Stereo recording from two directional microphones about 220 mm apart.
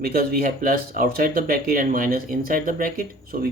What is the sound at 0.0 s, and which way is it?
Speech, 45° right (ahead or behind).